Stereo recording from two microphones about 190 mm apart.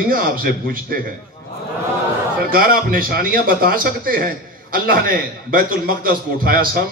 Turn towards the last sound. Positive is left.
turn(degrees=-50)  # may be behind; listen again after turning